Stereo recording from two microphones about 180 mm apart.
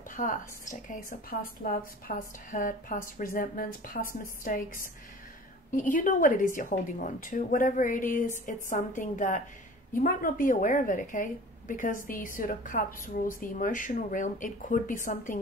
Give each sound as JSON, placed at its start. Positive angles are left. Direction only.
{"t": 0.1, "sound": "a woman's voice", "side_deg": 45}
{"t": 5.8, "sound": "a woman's voice", "side_deg": 45}